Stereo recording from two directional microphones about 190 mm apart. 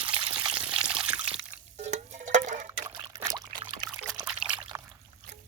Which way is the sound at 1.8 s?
40° right (ahead or behind).